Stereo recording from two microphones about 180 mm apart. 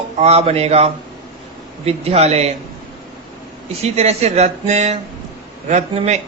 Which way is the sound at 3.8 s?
35° right (ahead or behind).